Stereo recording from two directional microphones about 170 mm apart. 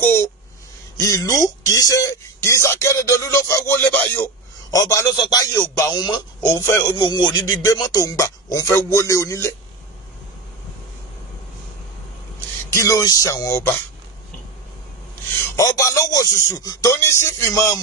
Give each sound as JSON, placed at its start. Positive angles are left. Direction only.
{"t": 0.0, "sound": "a sound", "side_deg": 15}
{"t": 0.9, "sound": "speech", "side_deg": 20}
{"t": 12.6, "sound": "speech", "side_deg": 20}
{"t": 15.4, "sound": "speech", "side_deg": 15}